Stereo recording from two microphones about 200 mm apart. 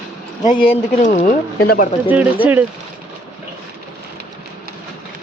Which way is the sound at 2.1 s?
10° right (ahead or behind).